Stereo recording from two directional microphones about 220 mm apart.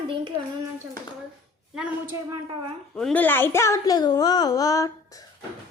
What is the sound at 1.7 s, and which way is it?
A child's voice, 5° right (ahead or behind).